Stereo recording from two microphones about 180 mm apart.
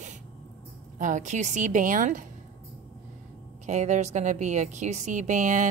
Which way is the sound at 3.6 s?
40° right (ahead or behind).